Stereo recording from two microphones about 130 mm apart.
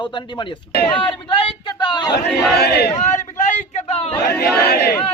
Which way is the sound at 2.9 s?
65° left (ahead or behind).